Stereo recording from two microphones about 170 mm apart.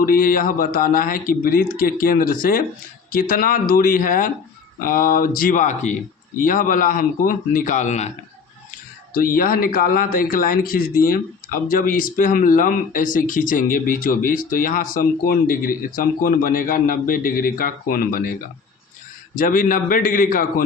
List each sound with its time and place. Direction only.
0.0 s speech: 55° left (ahead or behind)
9.1 s speech: 55° left (ahead or behind)